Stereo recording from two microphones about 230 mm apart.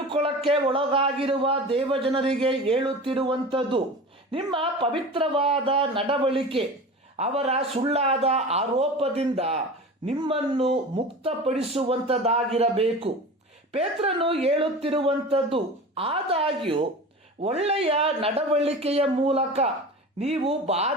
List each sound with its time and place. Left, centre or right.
0.1 s a man's voice: right